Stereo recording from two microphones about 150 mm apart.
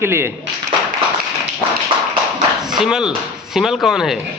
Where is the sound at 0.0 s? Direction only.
15° right (ahead or behind).